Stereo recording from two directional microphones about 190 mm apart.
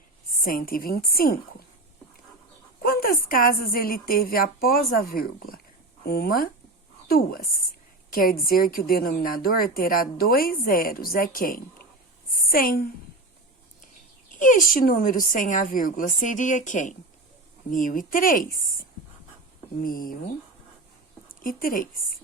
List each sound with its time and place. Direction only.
0.4 s a woman's voice: 50° left (ahead or behind)
2.8 s a woman's voice: 50° left (ahead or behind)
14.3 s a woman's voice: 45° left (ahead or behind)
19.8 s a woman's voice: 50° left (ahead or behind)
21.2 s speech: 45° left (ahead or behind)